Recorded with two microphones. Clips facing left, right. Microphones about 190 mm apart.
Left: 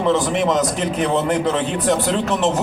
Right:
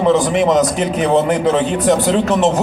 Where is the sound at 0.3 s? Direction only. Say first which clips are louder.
Right 5 dB; 15° right (ahead or behind).